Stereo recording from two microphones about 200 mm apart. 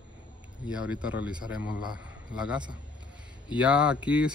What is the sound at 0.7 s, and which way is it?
A man's voice, 5° right (ahead or behind).